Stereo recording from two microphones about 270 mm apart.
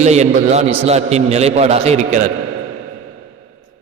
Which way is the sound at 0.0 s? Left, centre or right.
Right.